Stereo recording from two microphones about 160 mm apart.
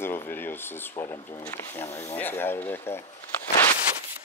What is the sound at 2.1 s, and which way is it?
Speech, 15° left (ahead or behind).